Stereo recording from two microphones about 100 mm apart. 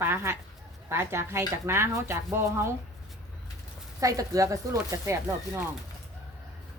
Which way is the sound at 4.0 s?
35° right (ahead or behind).